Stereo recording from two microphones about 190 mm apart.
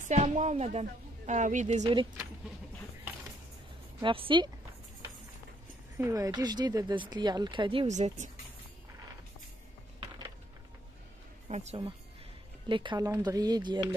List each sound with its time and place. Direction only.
0.0 s a woman's voice: 35° right (ahead or behind)
1.8 s speech: 25° right (ahead or behind)
4.0 s speech: 25° right (ahead or behind)
5.9 s speech: 15° right (ahead or behind); by 8.3 s 35° right (ahead or behind)
11.4 s speech: 35° right (ahead or behind)
12.6 s speech: 25° right (ahead or behind)